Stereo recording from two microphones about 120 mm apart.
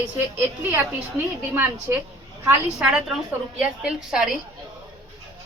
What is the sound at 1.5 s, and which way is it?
Speech, 15° right (ahead or behind).